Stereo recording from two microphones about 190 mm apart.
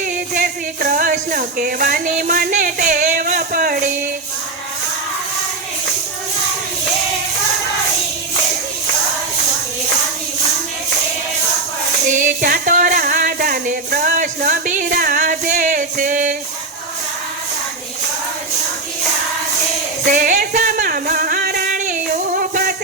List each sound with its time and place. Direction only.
0.3 s music: 50° right (ahead or behind)
12.2 s music: 45° right (ahead or behind)
20.1 s music: 45° right (ahead or behind)